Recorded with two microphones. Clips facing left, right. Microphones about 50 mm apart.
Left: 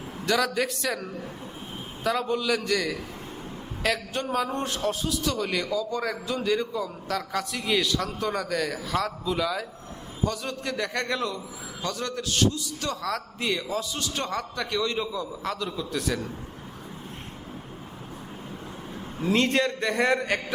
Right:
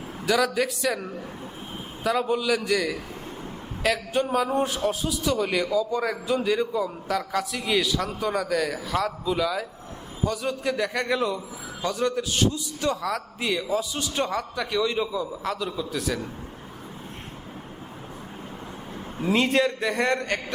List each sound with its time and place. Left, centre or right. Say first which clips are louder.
0.3 s a man's voice: right 2 dB; centre
2.0 s a man's voice: right 2 dB; centre
11.8 s a man's voice: right 6 dB; centre
13.1 s a man's voice: right 1 dB; centre
19.3 s a man's voice: right 2 dB; centre